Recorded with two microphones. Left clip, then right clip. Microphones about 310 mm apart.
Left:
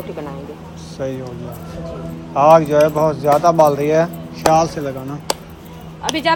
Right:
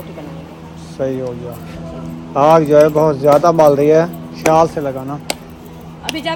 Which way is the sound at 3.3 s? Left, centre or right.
Right.